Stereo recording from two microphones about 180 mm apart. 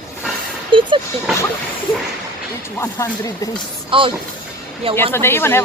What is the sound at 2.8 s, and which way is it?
Speech, 20° left (ahead or behind).